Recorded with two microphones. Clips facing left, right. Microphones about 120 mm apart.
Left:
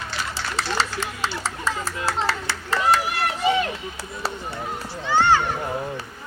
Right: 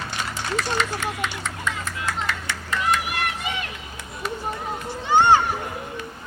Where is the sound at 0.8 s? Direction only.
30° left (ahead or behind).